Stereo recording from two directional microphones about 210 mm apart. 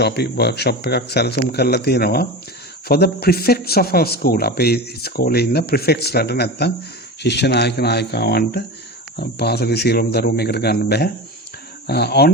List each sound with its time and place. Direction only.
0.0 s speech: 50° left (ahead or behind)